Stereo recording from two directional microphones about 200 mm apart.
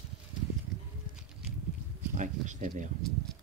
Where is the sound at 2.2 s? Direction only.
40° right (ahead or behind).